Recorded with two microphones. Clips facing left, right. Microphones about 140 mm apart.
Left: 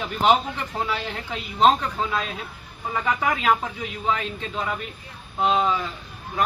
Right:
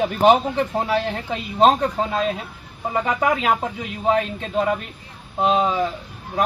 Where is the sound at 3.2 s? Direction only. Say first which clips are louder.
Right 1 dB; 35° right (ahead or behind).